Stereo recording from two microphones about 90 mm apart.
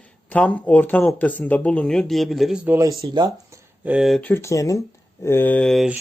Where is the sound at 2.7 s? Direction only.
35° right (ahead or behind).